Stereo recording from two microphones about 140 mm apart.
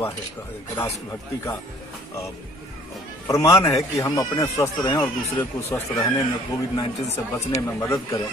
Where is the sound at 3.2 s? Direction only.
20° left (ahead or behind).